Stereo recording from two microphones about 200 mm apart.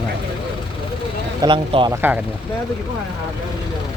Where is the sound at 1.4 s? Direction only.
25° right (ahead or behind).